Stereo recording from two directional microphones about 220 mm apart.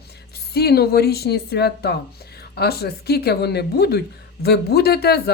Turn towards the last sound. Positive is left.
turn(degrees=45)  # may be behind; listen again after turning